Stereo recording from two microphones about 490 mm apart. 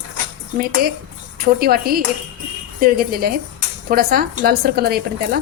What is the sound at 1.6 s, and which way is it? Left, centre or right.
A woman's voice, centre.